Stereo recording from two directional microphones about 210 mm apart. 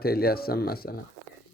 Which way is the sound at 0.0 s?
45° left (ahead or behind).